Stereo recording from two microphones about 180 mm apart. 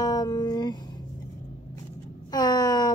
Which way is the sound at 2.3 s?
20° left (ahead or behind).